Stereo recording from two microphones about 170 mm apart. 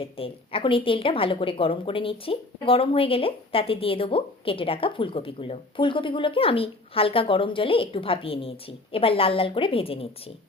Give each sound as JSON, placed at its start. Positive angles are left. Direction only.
{"t": 0.0, "sound": "a woman's voice", "side_deg": 30}